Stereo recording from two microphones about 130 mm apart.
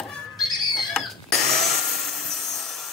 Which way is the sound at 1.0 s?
5° left (ahead or behind).